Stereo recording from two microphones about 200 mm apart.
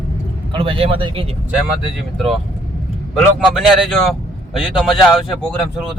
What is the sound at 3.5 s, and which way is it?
Speech, centre (ahead or behind).